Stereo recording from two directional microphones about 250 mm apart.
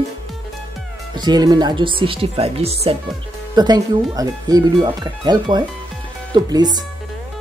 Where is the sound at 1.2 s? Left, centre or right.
Centre.